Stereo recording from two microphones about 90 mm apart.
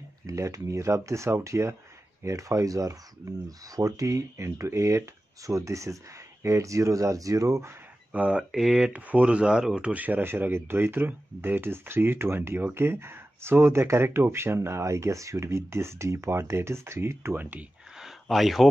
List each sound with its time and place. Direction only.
0.3 s speech: 35° right (ahead or behind)
8.1 s speech: 15° right (ahead or behind)
17.9 s a sound: 5° right (ahead or behind)